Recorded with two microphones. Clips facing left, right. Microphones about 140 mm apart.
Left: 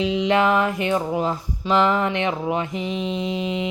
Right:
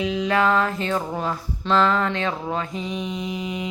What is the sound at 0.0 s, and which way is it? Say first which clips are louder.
Speech: left 2 dB; 25° left (ahead or behind).